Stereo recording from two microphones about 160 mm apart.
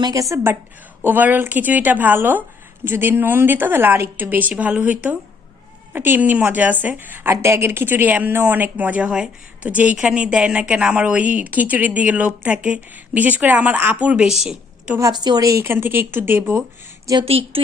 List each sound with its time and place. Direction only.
0.0 s a woman's voice: 20° right (ahead or behind)
14.4 s a sound: 5° right (ahead or behind)
14.9 s a woman's voice: 25° right (ahead or behind)
17.2 s a woman's voice: 35° right (ahead or behind)